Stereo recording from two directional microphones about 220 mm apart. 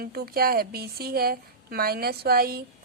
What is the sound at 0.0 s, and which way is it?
A woman's voice, 45° right (ahead or behind).